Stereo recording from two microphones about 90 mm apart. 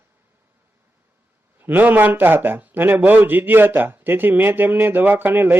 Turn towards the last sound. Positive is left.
turn(degrees=-25)  # may be behind; listen again after turning